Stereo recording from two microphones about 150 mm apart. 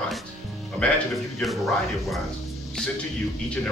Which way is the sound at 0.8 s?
5° left (ahead or behind).